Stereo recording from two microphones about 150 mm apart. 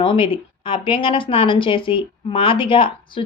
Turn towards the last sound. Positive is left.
turn(degrees=35)  # may be behind; listen again after turning